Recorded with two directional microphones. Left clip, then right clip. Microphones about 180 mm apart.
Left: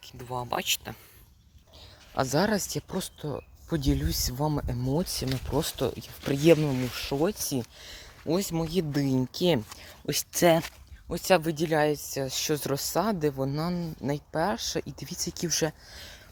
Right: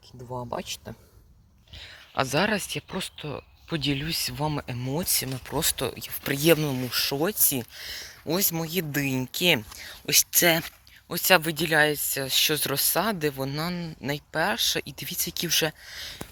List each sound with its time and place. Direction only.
0.0 s speech: 10° left (ahead or behind)
1.8 s a sound: 5° left (ahead or behind)
3.0 s speech: 15° left (ahead or behind)
5.5 s speech: 25° left (ahead or behind)
10.1 s speech: 30° left (ahead or behind)
11.1 s speech: 5° left (ahead or behind)